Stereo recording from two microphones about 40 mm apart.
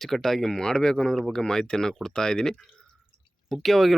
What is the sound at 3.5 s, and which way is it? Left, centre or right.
Speech, centre.